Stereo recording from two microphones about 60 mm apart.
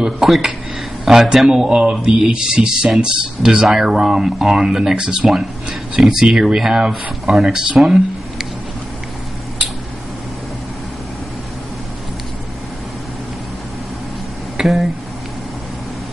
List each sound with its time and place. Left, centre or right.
0.0 s speech: centre
1.0 s mantra: centre
14.6 s speech: centre